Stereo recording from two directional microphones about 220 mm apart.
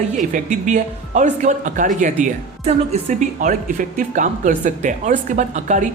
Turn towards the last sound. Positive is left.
turn(degrees=-35)  # may be behind; listen again after turning